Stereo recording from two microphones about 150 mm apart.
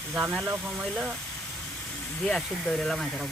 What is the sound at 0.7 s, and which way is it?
Speech, centre (ahead or behind).